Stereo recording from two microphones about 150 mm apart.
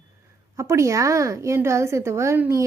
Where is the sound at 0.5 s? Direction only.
20° right (ahead or behind).